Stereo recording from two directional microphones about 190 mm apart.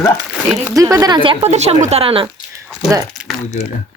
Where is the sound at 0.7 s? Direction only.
15° right (ahead or behind).